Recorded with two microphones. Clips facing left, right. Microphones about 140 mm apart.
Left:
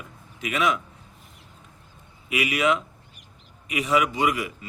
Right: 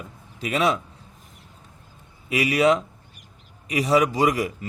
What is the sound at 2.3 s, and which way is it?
A man's voice, 35° right (ahead or behind).